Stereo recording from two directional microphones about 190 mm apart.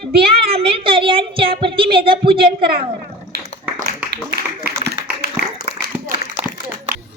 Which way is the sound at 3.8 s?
55° right (ahead or behind).